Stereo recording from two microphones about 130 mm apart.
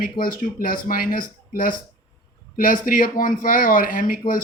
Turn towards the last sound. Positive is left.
turn(degrees=90)